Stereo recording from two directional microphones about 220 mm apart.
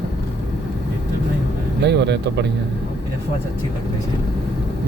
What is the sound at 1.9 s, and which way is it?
Speech, 50° right (ahead or behind).